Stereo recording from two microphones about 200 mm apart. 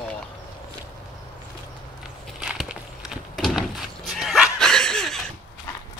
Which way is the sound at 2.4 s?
5° right (ahead or behind).